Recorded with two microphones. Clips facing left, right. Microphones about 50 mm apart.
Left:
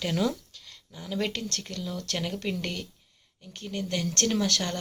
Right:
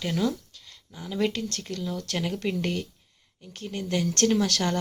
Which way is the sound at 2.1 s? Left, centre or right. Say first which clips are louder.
Right 2 dB; centre.